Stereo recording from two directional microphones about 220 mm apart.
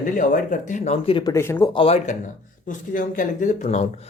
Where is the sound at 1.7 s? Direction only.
30° left (ahead or behind).